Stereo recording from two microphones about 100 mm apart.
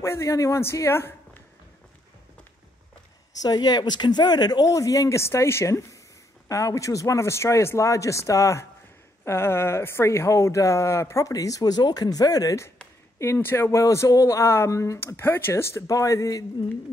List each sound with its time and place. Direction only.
0.0 s speech: 30° left (ahead or behind)
3.4 s speech: 45° left (ahead or behind)